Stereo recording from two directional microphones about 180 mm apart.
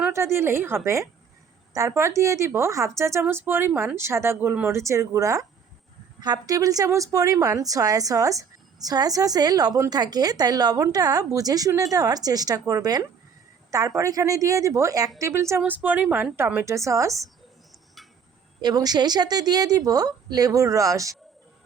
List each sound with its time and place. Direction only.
0.0 s a woman's voice: 15° right (ahead or behind)
18.6 s a woman's voice: 20° right (ahead or behind)